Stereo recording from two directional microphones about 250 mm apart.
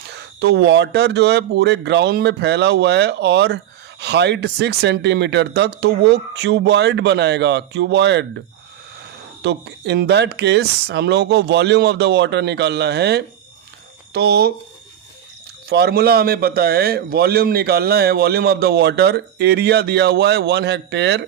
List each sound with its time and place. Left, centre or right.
0.1 s speech: right
9.4 s a man's voice: right
15.7 s a man's voice: right